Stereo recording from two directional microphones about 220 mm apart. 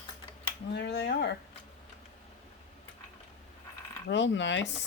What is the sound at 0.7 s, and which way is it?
Speech, 50° left (ahead or behind).